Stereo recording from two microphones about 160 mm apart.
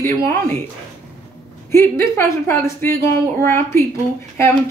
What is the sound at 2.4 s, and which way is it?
Speech, 15° left (ahead or behind).